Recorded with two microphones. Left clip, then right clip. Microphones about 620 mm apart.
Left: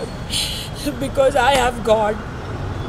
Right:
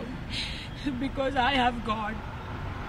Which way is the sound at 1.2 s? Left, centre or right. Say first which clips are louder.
Left 10 dB; left.